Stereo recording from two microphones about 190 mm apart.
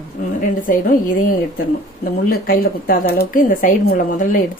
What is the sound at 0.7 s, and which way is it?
Speech, 45° left (ahead or behind).